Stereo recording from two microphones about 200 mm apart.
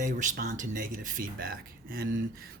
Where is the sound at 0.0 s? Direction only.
40° right (ahead or behind).